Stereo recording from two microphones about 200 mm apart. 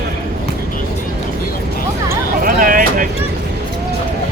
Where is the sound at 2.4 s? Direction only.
45° right (ahead or behind).